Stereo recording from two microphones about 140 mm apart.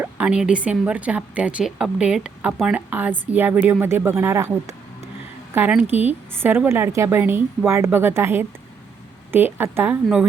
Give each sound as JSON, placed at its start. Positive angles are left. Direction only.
{"t": 0.0, "sound": "a woman's voice", "side_deg": -10}